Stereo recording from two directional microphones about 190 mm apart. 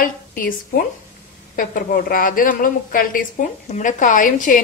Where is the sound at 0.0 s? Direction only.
50° left (ahead or behind).